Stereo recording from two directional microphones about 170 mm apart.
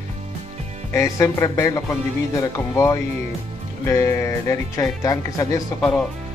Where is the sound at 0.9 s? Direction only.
15° left (ahead or behind).